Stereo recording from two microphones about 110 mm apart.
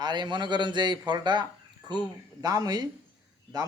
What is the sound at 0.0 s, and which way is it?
A man's voice, 40° right (ahead or behind).